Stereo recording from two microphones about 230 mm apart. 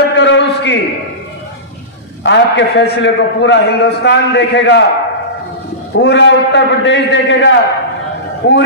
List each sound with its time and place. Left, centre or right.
0.1 s a sound: left
2.2 s a man's voice: left
5.9 s a man's voice: left